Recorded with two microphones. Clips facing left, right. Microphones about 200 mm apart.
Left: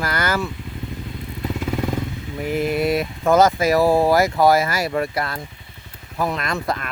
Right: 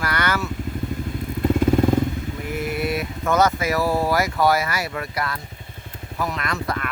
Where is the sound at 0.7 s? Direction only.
45° right (ahead or behind).